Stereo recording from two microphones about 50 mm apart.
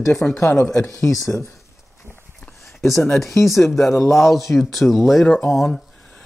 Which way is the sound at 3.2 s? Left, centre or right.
Centre.